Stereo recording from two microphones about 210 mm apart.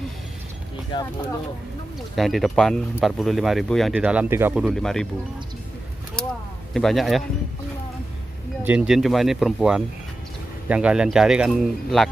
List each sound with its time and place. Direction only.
0.9 s speech: 20° left (ahead or behind)
2.1 s speech: centre (ahead or behind)
6.7 s speech: centre (ahead or behind)
8.6 s speech: 5° right (ahead or behind)